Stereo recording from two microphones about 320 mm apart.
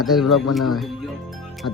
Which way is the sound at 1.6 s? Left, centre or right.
Left.